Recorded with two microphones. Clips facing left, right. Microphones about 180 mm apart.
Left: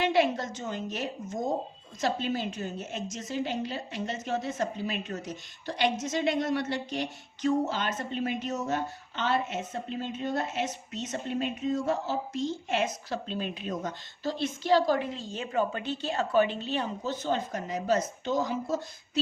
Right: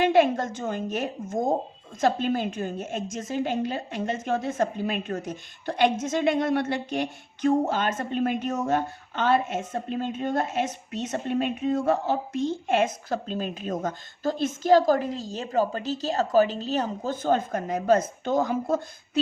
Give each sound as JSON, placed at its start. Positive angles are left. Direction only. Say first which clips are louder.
{"t": 0.0, "sound": "a woman's voice", "louder": "right 5 dB", "side_deg": -50}